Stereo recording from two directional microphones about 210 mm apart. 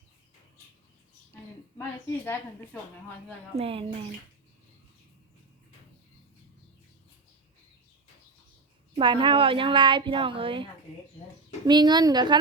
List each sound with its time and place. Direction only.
1.8 s a sound: 10° left (ahead or behind)
3.6 s a woman's voice: 25° right (ahead or behind)
9.0 s a woman's voice: 25° right (ahead or behind)